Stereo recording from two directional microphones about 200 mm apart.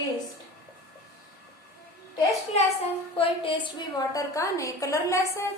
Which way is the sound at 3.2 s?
25° left (ahead or behind).